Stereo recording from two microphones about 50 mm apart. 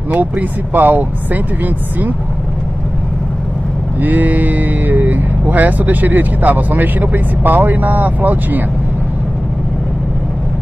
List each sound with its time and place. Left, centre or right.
0.1 s speech: right
4.0 s speech: right